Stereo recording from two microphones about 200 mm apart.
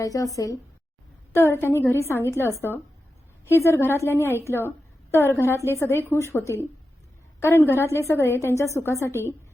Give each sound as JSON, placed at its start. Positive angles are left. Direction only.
{"t": 0.0, "sound": "a woman's voice", "side_deg": 15}